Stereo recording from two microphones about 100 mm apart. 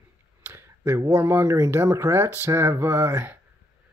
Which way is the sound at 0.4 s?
25° right (ahead or behind).